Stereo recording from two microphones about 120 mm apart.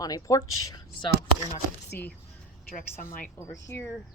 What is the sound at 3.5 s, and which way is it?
Speech, 25° left (ahead or behind).